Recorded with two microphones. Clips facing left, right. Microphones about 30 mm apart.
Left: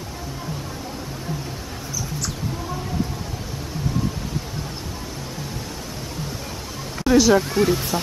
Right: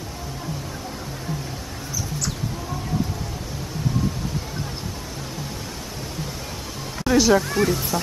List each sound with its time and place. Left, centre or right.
7.1 s speech: centre
7.9 s speech: left